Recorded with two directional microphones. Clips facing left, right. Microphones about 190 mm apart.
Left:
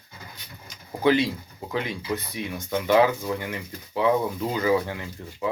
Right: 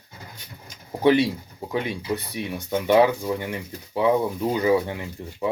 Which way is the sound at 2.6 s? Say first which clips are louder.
Right 2 dB; 20° right (ahead or behind).